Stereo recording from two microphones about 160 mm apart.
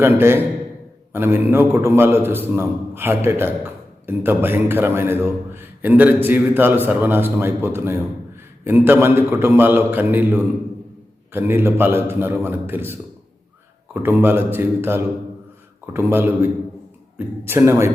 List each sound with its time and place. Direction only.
0.0 s a man's voice: 15° right (ahead or behind)